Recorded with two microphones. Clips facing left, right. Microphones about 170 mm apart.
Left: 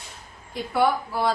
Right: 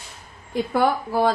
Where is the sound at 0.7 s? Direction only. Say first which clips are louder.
Right 1 dB; 45° right (ahead or behind).